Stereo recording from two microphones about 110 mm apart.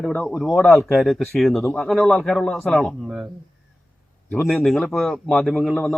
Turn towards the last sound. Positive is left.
turn(degrees=0)  # may be behind; listen again after turning